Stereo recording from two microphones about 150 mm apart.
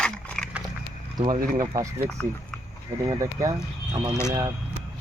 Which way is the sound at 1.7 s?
20° right (ahead or behind).